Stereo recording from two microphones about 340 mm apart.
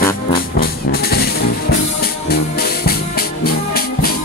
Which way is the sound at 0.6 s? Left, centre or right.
Left.